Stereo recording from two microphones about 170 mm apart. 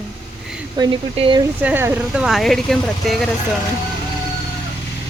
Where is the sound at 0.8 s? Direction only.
30° right (ahead or behind).